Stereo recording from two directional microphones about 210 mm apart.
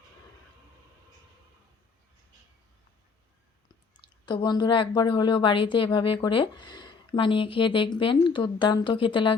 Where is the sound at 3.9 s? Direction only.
20° left (ahead or behind).